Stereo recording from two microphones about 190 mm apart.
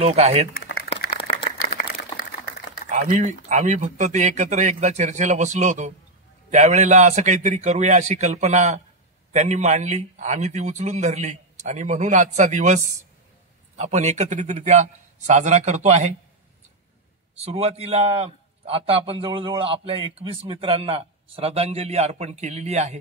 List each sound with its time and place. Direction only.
0.0 s a man's voice: 35° right (ahead or behind)
0.6 s crumpling: 55° left (ahead or behind)
1.1 s a sound: 30° left (ahead or behind)
2.9 s a man's voice: 40° right (ahead or behind)
17.4 s a man's voice: 30° right (ahead or behind)